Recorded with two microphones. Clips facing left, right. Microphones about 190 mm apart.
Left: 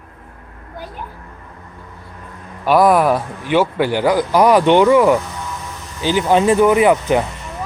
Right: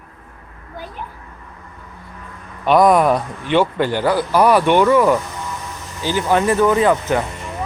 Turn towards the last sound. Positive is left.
turn(degrees=15)  # may be behind; listen again after turning